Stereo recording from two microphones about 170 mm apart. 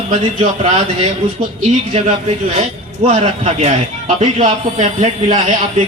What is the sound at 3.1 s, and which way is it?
A man's voice, 40° right (ahead or behind).